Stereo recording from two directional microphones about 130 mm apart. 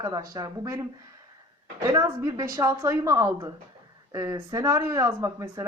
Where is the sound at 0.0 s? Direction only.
30° right (ahead or behind).